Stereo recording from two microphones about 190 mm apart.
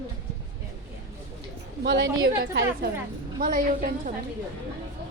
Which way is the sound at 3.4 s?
45° right (ahead or behind).